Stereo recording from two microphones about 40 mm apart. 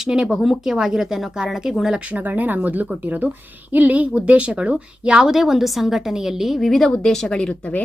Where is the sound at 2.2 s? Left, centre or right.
Right; by 6.6 s centre.